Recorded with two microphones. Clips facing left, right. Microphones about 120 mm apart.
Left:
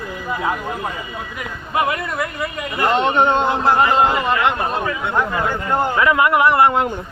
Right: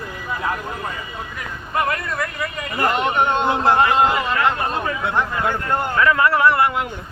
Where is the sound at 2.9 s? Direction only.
30° left (ahead or behind).